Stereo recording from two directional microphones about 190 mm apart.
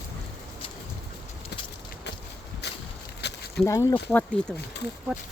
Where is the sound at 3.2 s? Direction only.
60° left (ahead or behind).